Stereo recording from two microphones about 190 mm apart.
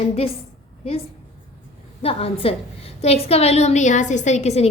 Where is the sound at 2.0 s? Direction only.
30° left (ahead or behind).